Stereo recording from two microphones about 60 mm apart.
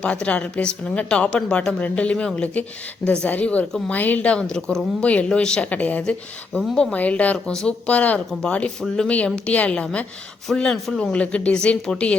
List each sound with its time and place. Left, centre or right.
0.0 s a woman's voice: left
5.7 s a woman's voice: left
7.3 s a woman's voice: centre
8.3 s speech: centre
9.0 s a woman's voice: left
11.1 s a woman's voice: centre